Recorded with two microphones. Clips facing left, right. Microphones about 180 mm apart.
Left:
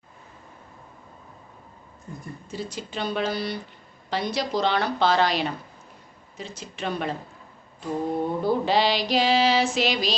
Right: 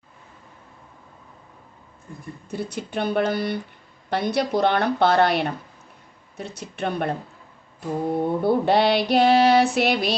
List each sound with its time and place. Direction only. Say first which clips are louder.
2.5 s female singing: right 4 dB; 60° right (ahead or behind)
8.4 s female singing: right 3 dB; 60° right (ahead or behind)